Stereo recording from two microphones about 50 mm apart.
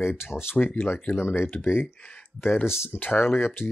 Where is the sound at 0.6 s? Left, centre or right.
Left.